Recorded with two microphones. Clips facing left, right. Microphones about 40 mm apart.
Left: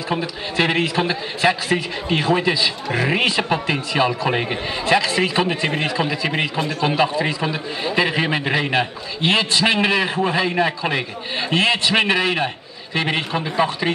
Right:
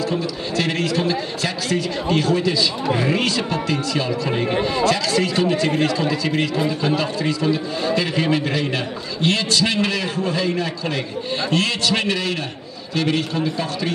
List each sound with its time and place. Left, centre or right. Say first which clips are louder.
0.1 s a man's voice: right 1 dB; left